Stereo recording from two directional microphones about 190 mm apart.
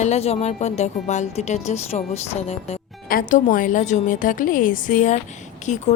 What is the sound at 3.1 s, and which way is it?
Speech, 45° left (ahead or behind).